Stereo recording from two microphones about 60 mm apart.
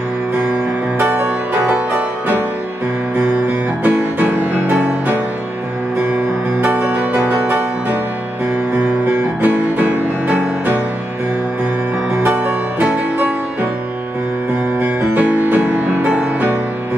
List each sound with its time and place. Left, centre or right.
0.9 s music: right
3.8 s music: right
6.6 s music: right
9.4 s music: right
15.0 s music: right